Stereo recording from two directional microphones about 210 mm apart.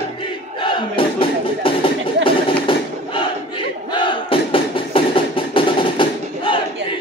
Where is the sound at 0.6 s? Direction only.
25° left (ahead or behind).